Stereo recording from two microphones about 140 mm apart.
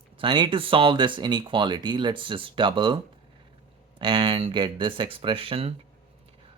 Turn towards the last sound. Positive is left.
turn(degrees=-40)  # may be behind; listen again after turning